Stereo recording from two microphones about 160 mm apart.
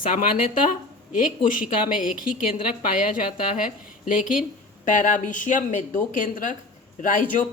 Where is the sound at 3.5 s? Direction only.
55° left (ahead or behind).